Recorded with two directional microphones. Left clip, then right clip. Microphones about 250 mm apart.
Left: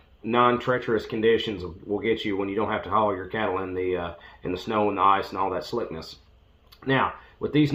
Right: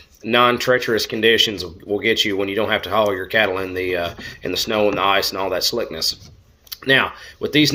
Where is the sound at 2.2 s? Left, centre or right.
Centre.